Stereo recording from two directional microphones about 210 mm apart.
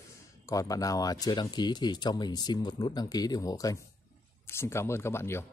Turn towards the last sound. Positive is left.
turn(degrees=10)  # may be behind; listen again after turning